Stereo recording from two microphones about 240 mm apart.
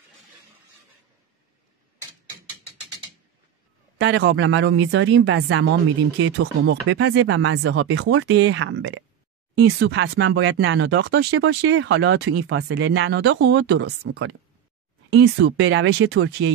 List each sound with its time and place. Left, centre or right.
4.0 s speech: right